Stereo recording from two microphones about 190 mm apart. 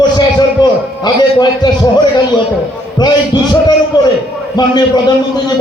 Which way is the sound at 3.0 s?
20° left (ahead or behind).